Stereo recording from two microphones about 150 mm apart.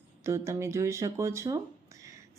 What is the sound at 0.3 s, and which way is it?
Speech, 20° right (ahead or behind).